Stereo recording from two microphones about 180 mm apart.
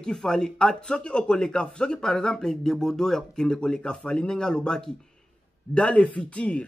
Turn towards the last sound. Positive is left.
turn(degrees=5)  # may be behind; listen again after turning